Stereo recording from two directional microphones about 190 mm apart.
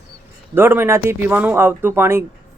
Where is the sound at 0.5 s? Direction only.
10° right (ahead or behind).